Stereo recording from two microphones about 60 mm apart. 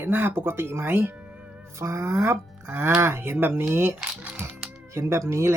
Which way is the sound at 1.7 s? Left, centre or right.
Right.